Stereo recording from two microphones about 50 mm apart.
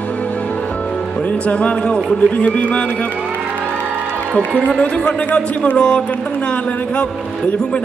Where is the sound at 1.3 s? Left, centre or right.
Left.